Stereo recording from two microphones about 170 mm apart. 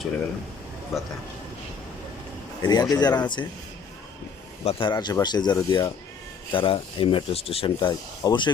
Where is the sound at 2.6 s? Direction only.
25° left (ahead or behind).